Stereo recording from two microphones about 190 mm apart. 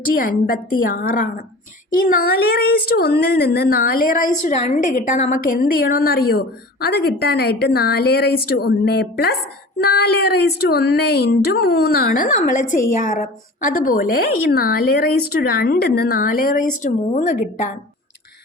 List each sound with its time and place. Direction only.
0.2 s speech: 50° left (ahead or behind)